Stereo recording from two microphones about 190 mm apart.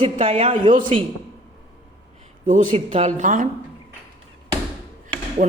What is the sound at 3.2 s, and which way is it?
Speech, 45° right (ahead or behind).